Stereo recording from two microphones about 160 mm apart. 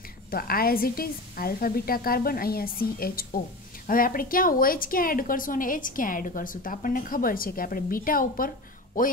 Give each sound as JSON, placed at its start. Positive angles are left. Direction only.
{"t": 0.3, "sound": "a woman's voice", "side_deg": 65}